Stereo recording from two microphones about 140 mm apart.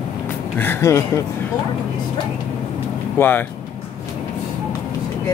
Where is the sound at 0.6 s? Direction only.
15° left (ahead or behind).